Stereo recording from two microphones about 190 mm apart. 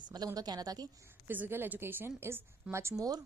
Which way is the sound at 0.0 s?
20° right (ahead or behind).